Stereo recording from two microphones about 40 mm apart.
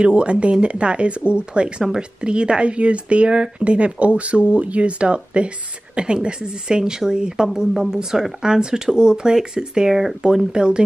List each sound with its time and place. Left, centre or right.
0.0 s speech: right; by 10.1 s centre
10.5 s speech: right